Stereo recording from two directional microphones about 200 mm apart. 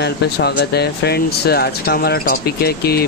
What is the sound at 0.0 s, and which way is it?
Speech, 55° left (ahead or behind).